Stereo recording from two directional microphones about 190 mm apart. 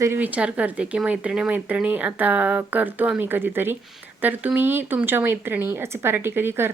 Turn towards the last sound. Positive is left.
turn(degrees=-10)  # may be behind; listen again after turning